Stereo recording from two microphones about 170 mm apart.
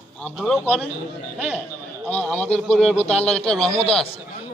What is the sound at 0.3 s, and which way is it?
Speech, centre (ahead or behind).